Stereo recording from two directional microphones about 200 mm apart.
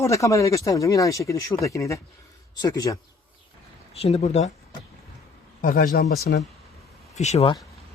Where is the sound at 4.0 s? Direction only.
30° left (ahead or behind).